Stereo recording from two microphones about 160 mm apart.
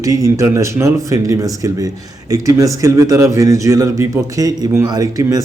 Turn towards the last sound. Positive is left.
turn(degrees=-20)  # may be behind; listen again after turning